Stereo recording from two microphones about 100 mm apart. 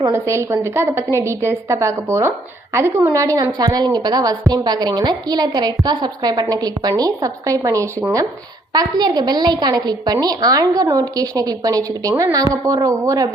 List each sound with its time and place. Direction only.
0.1 s a woman's voice: 25° right (ahead or behind)